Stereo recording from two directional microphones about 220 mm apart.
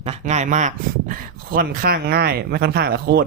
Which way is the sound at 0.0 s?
30° right (ahead or behind).